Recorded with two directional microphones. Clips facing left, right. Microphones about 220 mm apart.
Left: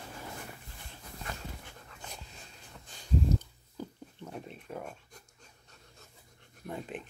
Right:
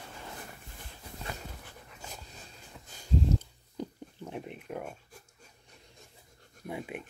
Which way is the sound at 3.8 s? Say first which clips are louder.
Right 3 dB; 15° right (ahead or behind).